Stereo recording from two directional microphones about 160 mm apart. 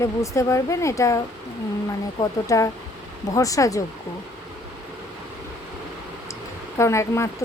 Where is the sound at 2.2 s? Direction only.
20° left (ahead or behind).